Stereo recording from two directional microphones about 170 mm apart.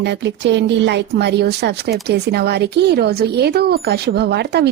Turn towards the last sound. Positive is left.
turn(degrees=-75)  # may be behind; listen again after turning